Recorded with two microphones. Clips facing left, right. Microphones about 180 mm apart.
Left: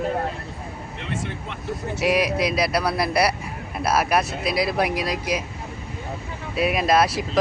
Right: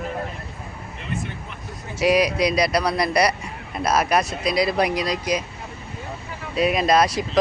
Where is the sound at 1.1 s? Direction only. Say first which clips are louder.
Even; 90° left.